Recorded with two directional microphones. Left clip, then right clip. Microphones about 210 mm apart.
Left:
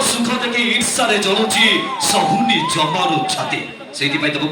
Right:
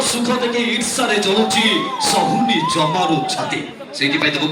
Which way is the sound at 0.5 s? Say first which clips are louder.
Left 2 dB; 55° right (ahead or behind).